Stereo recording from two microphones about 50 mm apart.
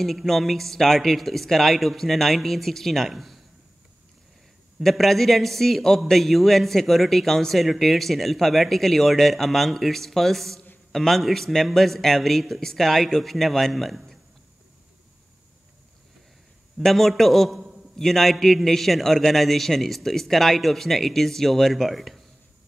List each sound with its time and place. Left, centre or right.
0.0 s a man's voice: centre
4.8 s a man's voice: centre
16.8 s a man's voice: centre